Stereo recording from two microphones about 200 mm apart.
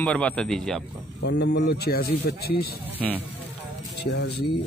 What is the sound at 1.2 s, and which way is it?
Speech, 55° left (ahead or behind).